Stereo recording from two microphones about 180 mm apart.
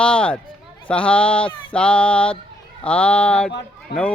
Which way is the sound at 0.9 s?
5° left (ahead or behind).